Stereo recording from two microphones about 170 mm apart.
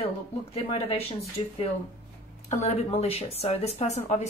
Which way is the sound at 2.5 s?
40° left (ahead or behind).